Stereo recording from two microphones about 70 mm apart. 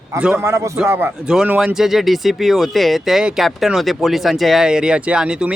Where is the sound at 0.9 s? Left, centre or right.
Right.